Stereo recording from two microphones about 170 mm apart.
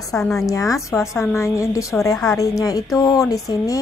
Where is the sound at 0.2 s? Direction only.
Centre (ahead or behind).